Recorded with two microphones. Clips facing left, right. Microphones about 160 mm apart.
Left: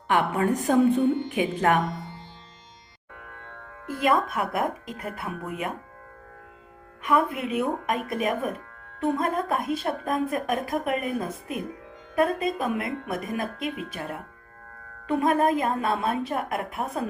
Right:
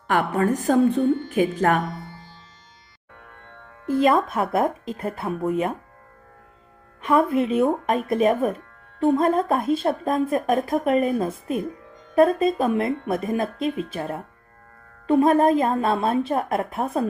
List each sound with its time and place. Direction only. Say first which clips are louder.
0.1 s a woman's voice: right 2 dB; 45° right (ahead or behind)
3.8 s a woman's voice: right 5 dB; 25° right (ahead or behind)
7.0 s a woman's voice: right 5 dB; 25° right (ahead or behind)